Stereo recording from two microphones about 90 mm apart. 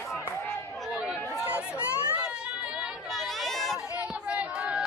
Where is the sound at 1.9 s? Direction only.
30° left (ahead or behind).